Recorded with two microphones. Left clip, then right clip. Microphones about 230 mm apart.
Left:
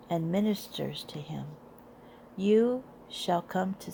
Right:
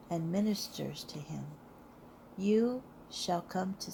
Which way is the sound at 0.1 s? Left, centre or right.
Left.